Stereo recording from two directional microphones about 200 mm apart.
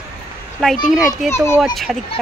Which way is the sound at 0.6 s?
Centre (ahead or behind).